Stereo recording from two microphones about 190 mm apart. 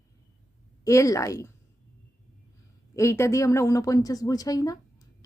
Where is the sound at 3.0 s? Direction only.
15° left (ahead or behind).